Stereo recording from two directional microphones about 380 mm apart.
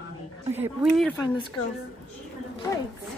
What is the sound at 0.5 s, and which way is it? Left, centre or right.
Speech, centre.